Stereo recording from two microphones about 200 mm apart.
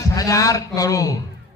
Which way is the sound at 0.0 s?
15° left (ahead or behind).